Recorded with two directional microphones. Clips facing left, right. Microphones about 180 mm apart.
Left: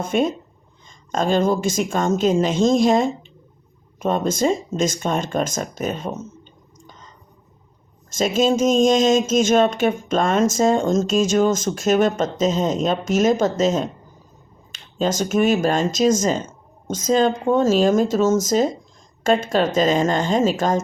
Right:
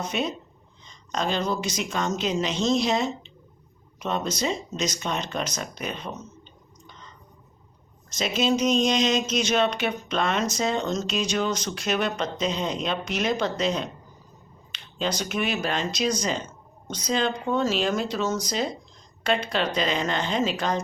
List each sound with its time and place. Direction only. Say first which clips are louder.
0.0 s speech: left 8 dB; 50° left (ahead or behind)
6.8 s a sound: left 2 dB; 40° left (ahead or behind)
8.1 s speech: left 6 dB; 45° left (ahead or behind)